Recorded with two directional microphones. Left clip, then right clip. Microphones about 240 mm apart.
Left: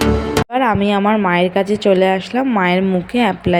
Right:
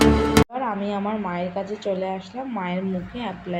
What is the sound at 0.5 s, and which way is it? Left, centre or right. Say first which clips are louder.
A woman's voice: left 11 dB; left.